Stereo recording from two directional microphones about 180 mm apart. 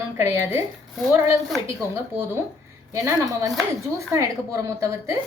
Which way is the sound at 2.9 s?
15° right (ahead or behind).